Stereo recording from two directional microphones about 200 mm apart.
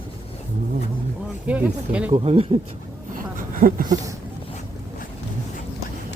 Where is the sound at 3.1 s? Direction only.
45° right (ahead or behind).